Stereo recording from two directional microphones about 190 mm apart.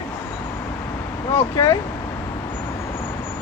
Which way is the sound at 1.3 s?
15° left (ahead or behind).